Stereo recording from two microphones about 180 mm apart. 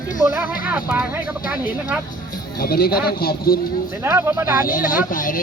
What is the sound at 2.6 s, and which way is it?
Speech, 55° left (ahead or behind).